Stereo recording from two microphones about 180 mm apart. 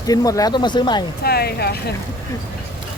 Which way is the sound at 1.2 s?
60° left (ahead or behind).